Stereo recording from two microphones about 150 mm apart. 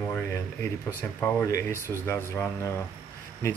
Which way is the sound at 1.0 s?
10° left (ahead or behind).